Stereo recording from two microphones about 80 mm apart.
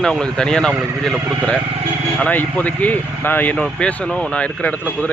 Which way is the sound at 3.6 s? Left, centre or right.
Centre.